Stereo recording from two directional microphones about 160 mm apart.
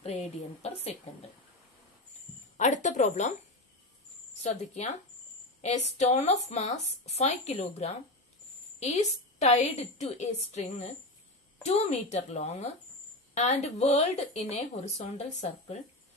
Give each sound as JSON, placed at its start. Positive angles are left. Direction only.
{"t": 0.0, "sound": "a sound", "side_deg": 40}
{"t": 2.5, "sound": "a woman's voice", "side_deg": 50}
{"t": 4.4, "sound": "speech", "side_deg": 45}